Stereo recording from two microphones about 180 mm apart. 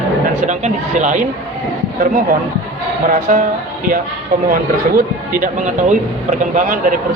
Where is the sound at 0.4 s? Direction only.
40° right (ahead or behind).